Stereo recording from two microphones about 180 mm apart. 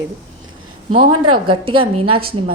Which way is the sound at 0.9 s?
30° right (ahead or behind).